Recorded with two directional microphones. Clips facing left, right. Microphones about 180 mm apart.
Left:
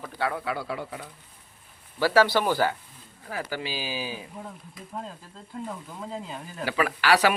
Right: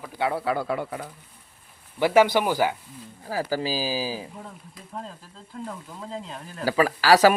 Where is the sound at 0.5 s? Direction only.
55° right (ahead or behind).